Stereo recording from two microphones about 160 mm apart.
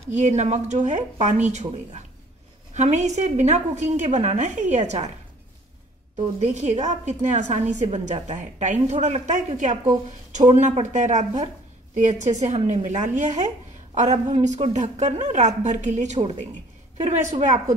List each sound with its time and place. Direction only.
0.1 s speech: 45° right (ahead or behind)
6.1 s speech: 45° right (ahead or behind)